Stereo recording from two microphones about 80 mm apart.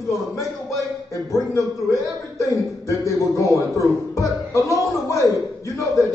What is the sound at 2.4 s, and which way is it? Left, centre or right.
Music, left.